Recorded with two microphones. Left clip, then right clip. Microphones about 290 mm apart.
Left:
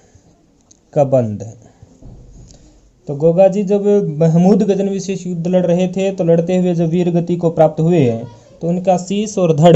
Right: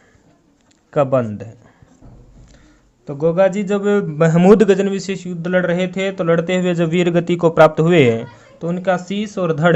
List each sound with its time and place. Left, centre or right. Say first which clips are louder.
0.9 s a man's voice: left 3 dB; centre
3.1 s a man's voice: left 4 dB; right
3.3 s a man's voice: left 4 dB; centre
8.6 s a man's voice: left 4 dB; centre